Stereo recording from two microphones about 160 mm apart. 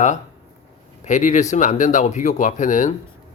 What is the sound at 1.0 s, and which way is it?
Speech, 50° left (ahead or behind).